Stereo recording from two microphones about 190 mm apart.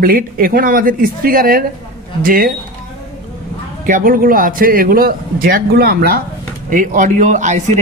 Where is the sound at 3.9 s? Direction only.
45° right (ahead or behind).